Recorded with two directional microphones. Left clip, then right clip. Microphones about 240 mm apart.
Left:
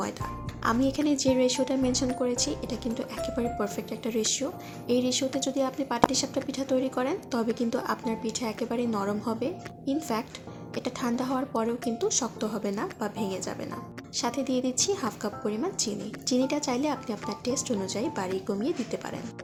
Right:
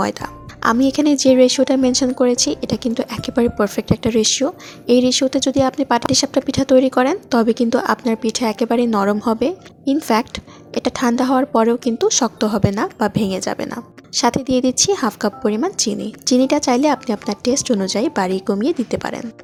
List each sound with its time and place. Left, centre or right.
0.0 s speech: right